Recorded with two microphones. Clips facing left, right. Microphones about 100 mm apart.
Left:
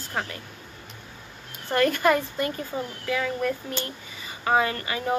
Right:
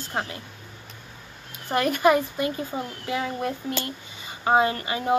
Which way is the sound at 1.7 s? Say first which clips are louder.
Right 1 dB; 15° right (ahead or behind).